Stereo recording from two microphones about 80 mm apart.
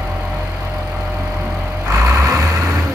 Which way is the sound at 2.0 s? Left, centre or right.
Right.